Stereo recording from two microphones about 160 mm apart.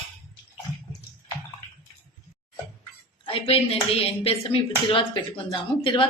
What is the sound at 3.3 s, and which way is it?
Speech, 35° left (ahead or behind).